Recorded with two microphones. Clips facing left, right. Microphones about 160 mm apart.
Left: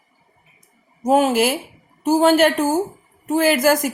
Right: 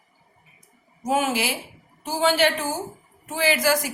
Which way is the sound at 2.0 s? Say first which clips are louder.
Left 7 dB; 50° left (ahead or behind).